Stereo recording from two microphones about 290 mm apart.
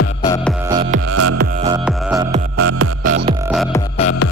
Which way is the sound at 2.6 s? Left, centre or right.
Right.